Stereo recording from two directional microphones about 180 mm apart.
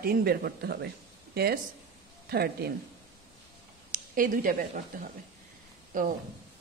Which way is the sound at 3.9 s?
50° right (ahead or behind).